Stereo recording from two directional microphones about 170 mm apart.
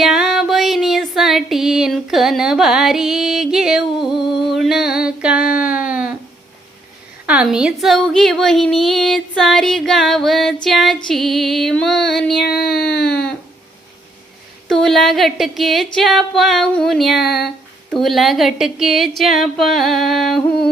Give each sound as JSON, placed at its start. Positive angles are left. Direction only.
{"t": 0.0, "sound": "music", "side_deg": 0}
{"t": 7.3, "sound": "a woman's voice", "side_deg": -5}
{"t": 12.5, "sound": "a sound", "side_deg": 70}
{"t": 14.7, "sound": "a woman's voice", "side_deg": 5}